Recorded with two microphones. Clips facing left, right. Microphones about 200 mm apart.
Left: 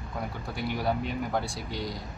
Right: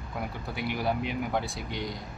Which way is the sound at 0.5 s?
65° right (ahead or behind).